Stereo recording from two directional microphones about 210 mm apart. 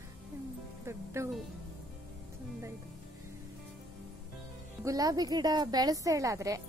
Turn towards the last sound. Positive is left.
turn(degrees=-15)  # may be behind; listen again after turning